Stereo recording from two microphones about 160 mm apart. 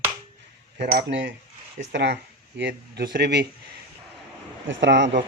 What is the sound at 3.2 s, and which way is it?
Speech, 90° right.